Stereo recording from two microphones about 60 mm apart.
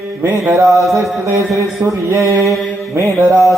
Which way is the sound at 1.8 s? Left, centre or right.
Right.